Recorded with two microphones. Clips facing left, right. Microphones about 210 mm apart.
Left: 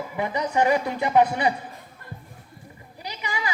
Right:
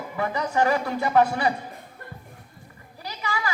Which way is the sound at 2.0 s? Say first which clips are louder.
Left 1 dB; 50° right (ahead or behind).